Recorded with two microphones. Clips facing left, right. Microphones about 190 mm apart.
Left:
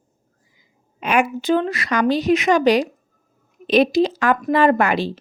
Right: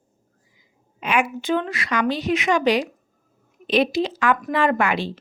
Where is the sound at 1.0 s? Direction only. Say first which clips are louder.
Left 3 dB; 40° left (ahead or behind).